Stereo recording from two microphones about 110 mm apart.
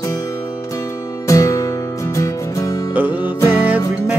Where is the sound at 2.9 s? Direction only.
15° right (ahead or behind).